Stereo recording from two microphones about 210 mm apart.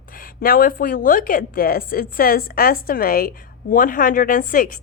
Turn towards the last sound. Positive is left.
turn(degrees=40)  # may be behind; listen again after turning